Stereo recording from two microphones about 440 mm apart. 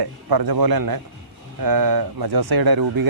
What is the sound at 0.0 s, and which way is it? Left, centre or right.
A man's voice, right.